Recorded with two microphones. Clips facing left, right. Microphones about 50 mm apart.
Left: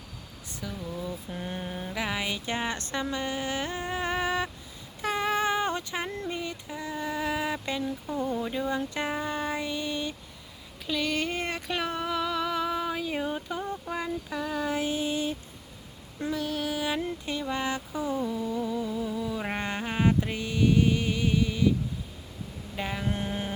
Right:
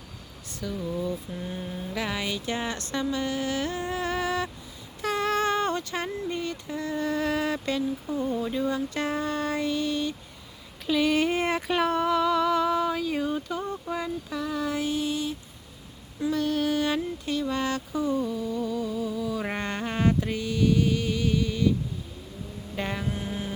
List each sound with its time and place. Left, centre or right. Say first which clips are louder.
0.6 s child singing: right 5 dB; centre
1.3 s mantra: even; left
1.9 s a sound: right 1 dB; centre
5.0 s female singing: right 1 dB; centre
8.4 s child singing: right 2 dB; centre
10.8 s a sound: right 6 dB; centre
13.9 s mantra: right 1 dB; centre
16.3 s music: right 5 dB; centre
17.2 s a sound: right 4 dB; left
18.4 s humming: right 1 dB; left
20.3 s music: right 1 dB; left
22.7 s vehicle: right 2 dB; centre
23.0 s mantra: left 1 dB; left